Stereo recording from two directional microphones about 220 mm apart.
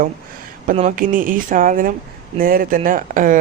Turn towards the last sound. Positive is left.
turn(degrees=-35)  # may be behind; listen again after turning